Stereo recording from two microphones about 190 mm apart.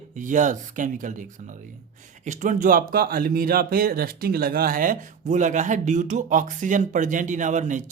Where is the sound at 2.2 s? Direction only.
40° right (ahead or behind).